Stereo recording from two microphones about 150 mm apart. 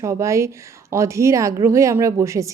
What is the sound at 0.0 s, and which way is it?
Speech, 20° right (ahead or behind).